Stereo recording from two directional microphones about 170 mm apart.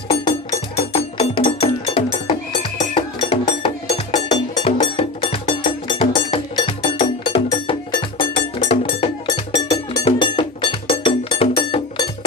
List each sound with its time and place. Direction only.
0.9 s music: 35° left (ahead or behind)
9.7 s cowbell: 30° left (ahead or behind)